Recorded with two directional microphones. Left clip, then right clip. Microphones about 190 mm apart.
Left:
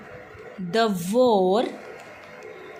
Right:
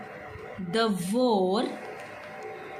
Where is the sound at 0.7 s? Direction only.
35° left (ahead or behind).